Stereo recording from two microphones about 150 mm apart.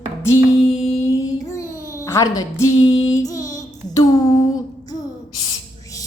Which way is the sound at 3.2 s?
25° left (ahead or behind).